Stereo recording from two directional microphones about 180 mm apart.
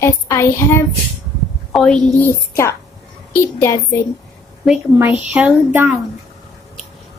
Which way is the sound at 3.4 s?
15° left (ahead or behind).